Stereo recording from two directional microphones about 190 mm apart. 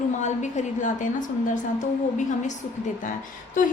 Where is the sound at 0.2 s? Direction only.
40° left (ahead or behind).